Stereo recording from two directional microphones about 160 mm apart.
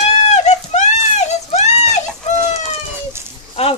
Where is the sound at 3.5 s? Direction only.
40° left (ahead or behind).